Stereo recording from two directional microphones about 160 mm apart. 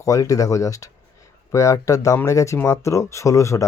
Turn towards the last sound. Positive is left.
turn(degrees=20)  # may be behind; listen again after turning